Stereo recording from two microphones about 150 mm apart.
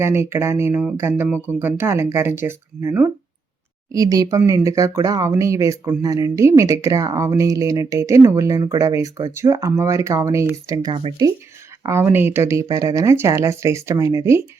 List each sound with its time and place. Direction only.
0.0 s speech: 15° right (ahead or behind)